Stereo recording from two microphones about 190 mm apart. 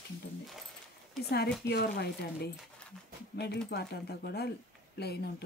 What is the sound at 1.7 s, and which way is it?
Speech, 60° left (ahead or behind).